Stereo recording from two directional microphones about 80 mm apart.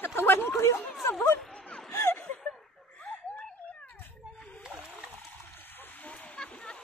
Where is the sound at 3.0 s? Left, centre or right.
Centre.